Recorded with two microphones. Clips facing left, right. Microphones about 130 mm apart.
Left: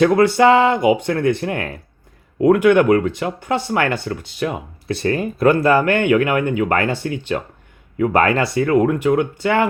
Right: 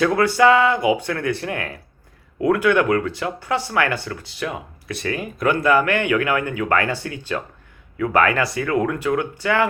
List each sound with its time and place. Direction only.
0.0 s speech: 25° left (ahead or behind)